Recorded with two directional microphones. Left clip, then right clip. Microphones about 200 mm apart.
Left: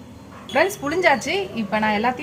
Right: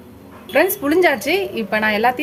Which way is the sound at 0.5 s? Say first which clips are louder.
Right 4 dB; 50° right (ahead or behind).